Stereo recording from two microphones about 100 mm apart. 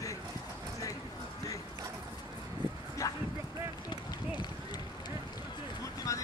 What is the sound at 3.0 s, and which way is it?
Dog, 35° left (ahead or behind).